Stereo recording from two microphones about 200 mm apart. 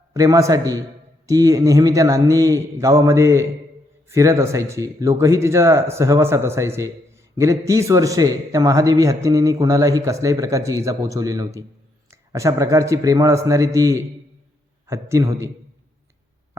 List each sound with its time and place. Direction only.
0.1 s a man's voice: 15° right (ahead or behind)